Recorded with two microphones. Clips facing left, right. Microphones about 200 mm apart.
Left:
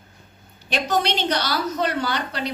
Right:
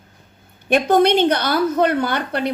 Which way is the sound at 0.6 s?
55° right (ahead or behind).